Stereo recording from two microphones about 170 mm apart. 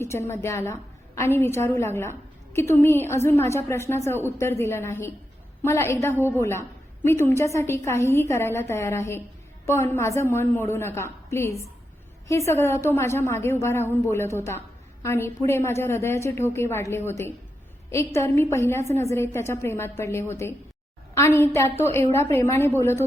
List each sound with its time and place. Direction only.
0.0 s a woman's voice: 15° left (ahead or behind)